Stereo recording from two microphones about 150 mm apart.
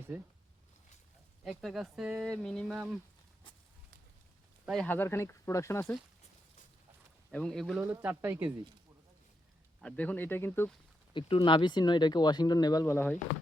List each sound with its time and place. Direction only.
0.1 s speech: 10° right (ahead or behind)
1.5 s speech: 5° right (ahead or behind)
4.6 s speech: centre (ahead or behind)
4.9 s speech: 15° left (ahead or behind)
7.3 s speech: 5° left (ahead or behind)
7.8 s speech: 15° right (ahead or behind)
9.8 s speech: 10° left (ahead or behind)
11.1 s speech: 35° left (ahead or behind); by 13.1 s 15° left (ahead or behind)